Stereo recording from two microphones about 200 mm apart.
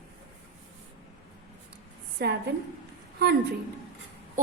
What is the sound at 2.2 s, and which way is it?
Speech, 50° right (ahead or behind).